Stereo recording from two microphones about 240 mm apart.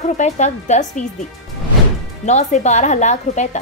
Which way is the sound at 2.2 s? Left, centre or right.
Left.